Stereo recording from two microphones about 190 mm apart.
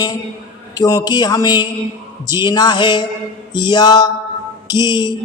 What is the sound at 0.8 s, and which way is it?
A man's voice, 20° left (ahead or behind).